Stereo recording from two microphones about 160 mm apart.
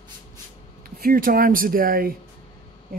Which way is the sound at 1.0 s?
60° right (ahead or behind).